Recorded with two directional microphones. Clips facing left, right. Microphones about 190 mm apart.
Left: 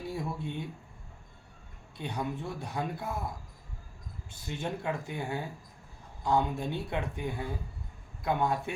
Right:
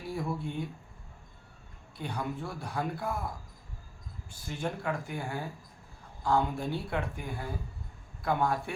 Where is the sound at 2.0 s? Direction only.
20° left (ahead or behind).